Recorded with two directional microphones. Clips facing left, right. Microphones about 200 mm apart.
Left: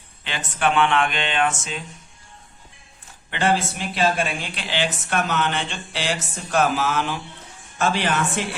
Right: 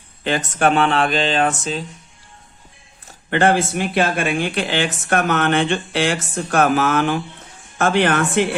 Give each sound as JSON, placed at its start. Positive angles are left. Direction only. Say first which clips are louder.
{"t": 0.3, "sound": "speech", "louder": "right 6 dB", "side_deg": -45}
{"t": 3.1, "sound": "speech", "louder": "right 5 dB", "side_deg": -50}